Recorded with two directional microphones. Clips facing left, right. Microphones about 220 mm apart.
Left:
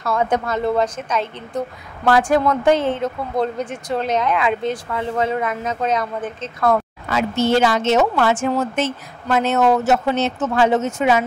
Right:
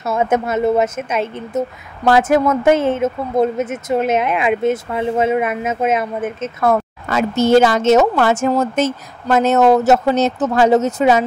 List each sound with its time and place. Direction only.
0.0 s speech: 25° right (ahead or behind)
2.0 s speech: 20° right (ahead or behind)
7.1 s speech: 45° right (ahead or behind)